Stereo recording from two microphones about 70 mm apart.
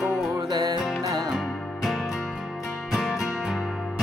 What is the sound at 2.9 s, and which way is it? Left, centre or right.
Music, centre.